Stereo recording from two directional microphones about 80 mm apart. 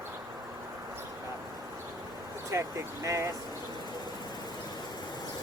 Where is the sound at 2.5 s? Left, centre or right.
Right.